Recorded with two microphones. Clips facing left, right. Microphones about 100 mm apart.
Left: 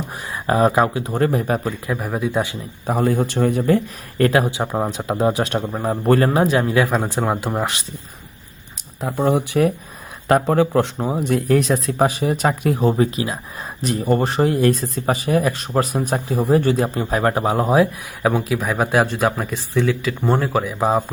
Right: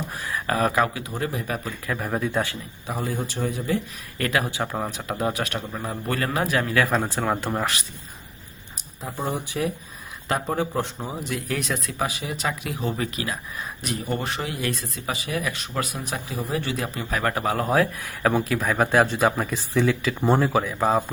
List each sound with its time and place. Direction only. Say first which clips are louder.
0.3 s speech: left 7 dB; 25° left (ahead or behind)
1.0 s speech: left 9 dB; 50° left (ahead or behind)
1.5 s a man's voice: left 8 dB; 35° left (ahead or behind)
1.9 s speech: left 2 dB; 5° left (ahead or behind)
2.8 s a man's voice: left 10 dB; 60° left (ahead or behind)
4.2 s speech: left 8 dB; 30° left (ahead or behind)
6.8 s speech: left 3 dB; 5° left (ahead or behind); by 7.9 s 20° left (ahead or behind)
9.0 s speech: left 10 dB; 80° left
10.2 s speech: left 9 dB; 65° left (ahead or behind); by 21.0 s 5° left (ahead or behind)